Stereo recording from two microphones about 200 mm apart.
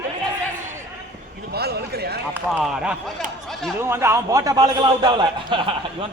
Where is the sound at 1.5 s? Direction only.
55° right (ahead or behind).